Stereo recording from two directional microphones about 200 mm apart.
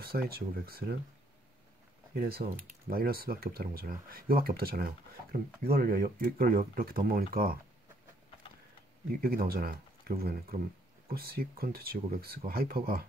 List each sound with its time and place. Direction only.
0.0 s speech: 50° right (ahead or behind)
2.1 s speech: 50° right (ahead or behind)
9.2 s speech: 45° right (ahead or behind)